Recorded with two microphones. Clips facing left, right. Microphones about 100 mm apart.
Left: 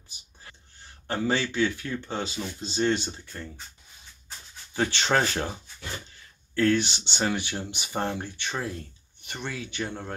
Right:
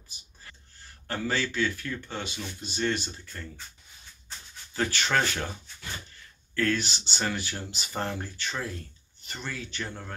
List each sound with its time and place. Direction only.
0.4 s speech: 20° left (ahead or behind)
4.7 s speech: 25° left (ahead or behind)